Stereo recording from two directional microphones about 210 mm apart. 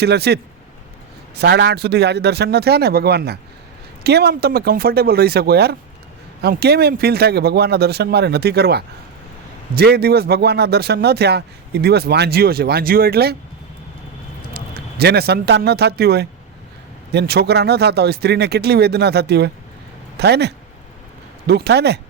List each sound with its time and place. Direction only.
0.0 s speech: 50° right (ahead or behind)
1.4 s speech: 55° right (ahead or behind)
14.5 s a man's voice: 50° right (ahead or behind)